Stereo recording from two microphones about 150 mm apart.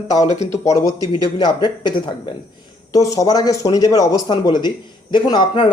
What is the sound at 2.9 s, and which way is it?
Speech, 20° left (ahead or behind).